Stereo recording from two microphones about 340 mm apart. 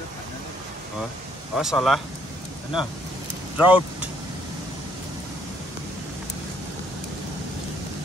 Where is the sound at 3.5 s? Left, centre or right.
Centre.